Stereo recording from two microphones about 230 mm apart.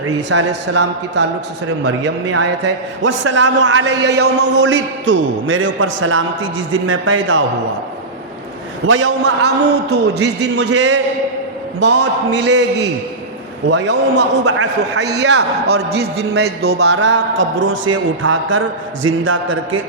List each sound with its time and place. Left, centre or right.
0.3 s a man's voice: right
2.3 s a man's voice: right
3.2 s a man's voice: right
4.2 s a man's voice: right
4.6 s a man's voice: right
8.9 s a man's voice: right
9.7 s a man's voice: right
10.8 s a man's voice: right
12.4 s a man's voice: right
13.7 s a man's voice: right